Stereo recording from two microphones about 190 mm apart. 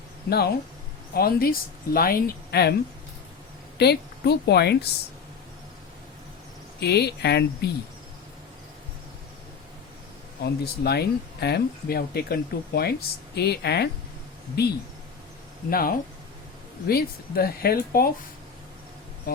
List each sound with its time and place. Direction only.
0.3 s speech: 55° left (ahead or behind)
3.8 s speech: 60° left (ahead or behind)
6.7 s speech: 60° left (ahead or behind)
10.4 s speech: 60° left (ahead or behind)